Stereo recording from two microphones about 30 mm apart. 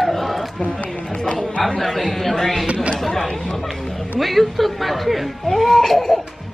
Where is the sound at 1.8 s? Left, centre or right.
Centre.